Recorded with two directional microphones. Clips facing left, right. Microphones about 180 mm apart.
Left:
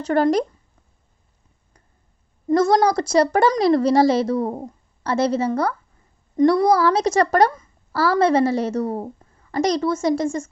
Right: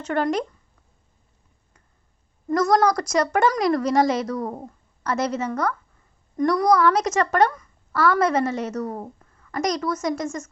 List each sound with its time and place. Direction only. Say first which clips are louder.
0.0 s a child's voice: left 5 dB; 35° left (ahead or behind)
2.5 s a woman's voice: left 3 dB; 25° left (ahead or behind)